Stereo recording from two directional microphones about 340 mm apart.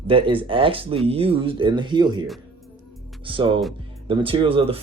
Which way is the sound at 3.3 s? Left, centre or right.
Centre.